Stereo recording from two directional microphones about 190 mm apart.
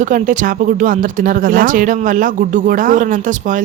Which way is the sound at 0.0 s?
40° right (ahead or behind).